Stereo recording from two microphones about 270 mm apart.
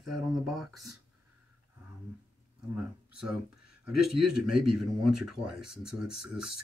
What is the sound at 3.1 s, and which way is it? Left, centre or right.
Speech, right.